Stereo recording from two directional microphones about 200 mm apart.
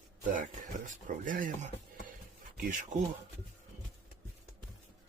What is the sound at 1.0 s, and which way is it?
Speech, 40° right (ahead or behind).